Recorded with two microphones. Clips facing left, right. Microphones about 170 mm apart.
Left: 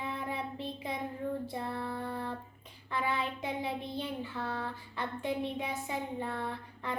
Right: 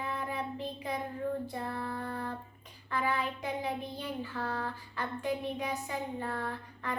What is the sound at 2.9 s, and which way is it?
Child singing, 25° left (ahead or behind).